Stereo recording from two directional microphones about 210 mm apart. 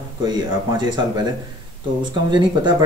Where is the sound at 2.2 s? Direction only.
20° right (ahead or behind).